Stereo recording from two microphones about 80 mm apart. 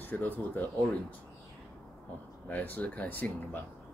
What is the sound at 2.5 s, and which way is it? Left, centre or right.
Speech, left.